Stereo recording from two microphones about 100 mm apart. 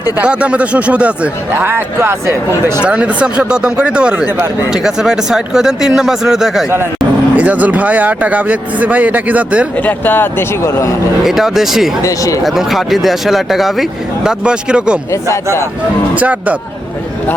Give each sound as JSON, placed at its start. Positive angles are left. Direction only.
{"t": 0.2, "sound": "a man's voice", "side_deg": -10}
{"t": 1.6, "sound": "speech", "side_deg": -25}
{"t": 2.8, "sound": "a man's voice", "side_deg": -10}
{"t": 7.3, "sound": "a man's voice", "side_deg": -15}
{"t": 9.7, "sound": "speech", "side_deg": 15}
{"t": 11.2, "sound": "speech", "side_deg": 0}
{"t": 12.0, "sound": "speech", "side_deg": 35}
{"t": 12.4, "sound": "a man's voice", "side_deg": 0}
{"t": 16.1, "sound": "a man's voice", "side_deg": -15}